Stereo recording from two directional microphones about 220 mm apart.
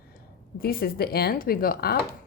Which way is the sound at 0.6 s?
45° left (ahead or behind).